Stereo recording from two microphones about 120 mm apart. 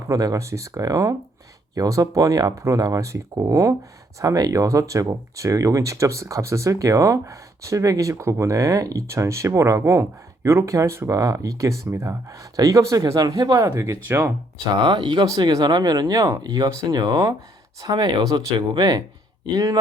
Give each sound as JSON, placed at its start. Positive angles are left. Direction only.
{"t": 0.1, "sound": "speech", "side_deg": -30}
{"t": 14.7, "sound": "speech", "side_deg": -40}